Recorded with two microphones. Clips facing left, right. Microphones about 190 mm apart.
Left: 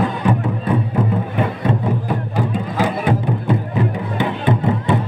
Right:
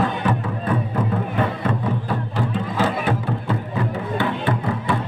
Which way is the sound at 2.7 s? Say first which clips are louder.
Left 3 dB; 15° left (ahead or behind).